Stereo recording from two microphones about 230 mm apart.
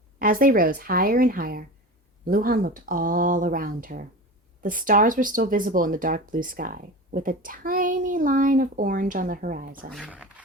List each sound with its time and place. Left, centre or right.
0.2 s speech: right
9.9 s speech: centre